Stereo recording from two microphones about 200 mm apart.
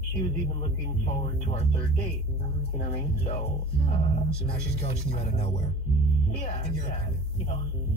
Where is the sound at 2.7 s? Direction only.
35° left (ahead or behind).